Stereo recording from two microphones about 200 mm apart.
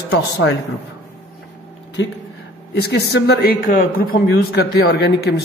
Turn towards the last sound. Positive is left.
turn(degrees=55)  # may be behind; listen again after turning